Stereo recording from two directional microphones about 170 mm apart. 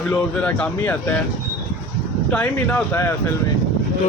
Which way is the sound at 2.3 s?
10° left (ahead or behind).